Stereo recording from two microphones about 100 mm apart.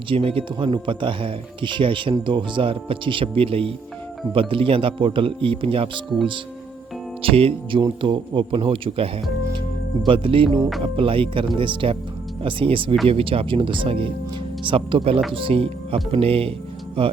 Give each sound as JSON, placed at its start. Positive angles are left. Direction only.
{"t": 0.1, "sound": "speech", "side_deg": -60}
{"t": 7.2, "sound": "speech", "side_deg": -65}
{"t": 7.8, "sound": "speech", "side_deg": -55}